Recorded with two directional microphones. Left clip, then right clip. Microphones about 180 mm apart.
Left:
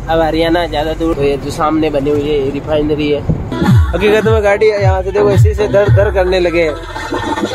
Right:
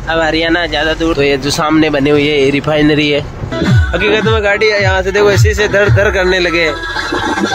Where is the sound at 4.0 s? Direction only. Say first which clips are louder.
Left 1 dB; 20° left (ahead or behind); by 6.7 s 5° left (ahead or behind).